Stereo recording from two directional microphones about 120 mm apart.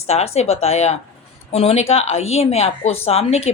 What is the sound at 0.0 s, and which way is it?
Speech, 60° left (ahead or behind).